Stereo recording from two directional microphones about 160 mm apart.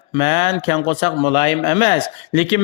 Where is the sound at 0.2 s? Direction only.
35° left (ahead or behind).